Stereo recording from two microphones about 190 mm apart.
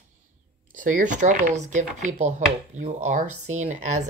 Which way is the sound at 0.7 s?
45° right (ahead or behind).